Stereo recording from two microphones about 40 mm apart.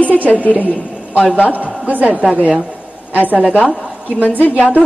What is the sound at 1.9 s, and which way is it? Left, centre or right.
Speech, right.